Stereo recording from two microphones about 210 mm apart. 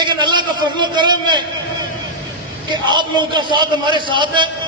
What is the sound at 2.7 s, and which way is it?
A man's voice, 20° right (ahead or behind).